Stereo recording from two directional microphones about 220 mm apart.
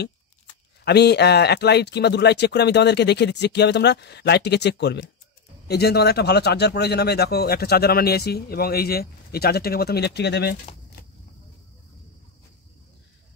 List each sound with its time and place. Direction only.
0.8 s speech: 50° left (ahead or behind)